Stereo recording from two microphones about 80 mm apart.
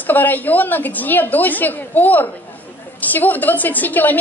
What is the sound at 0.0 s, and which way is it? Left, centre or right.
A woman's voice, left.